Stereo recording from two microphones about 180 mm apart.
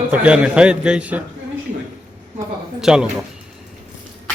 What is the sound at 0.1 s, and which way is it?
Speech, 5° right (ahead or behind).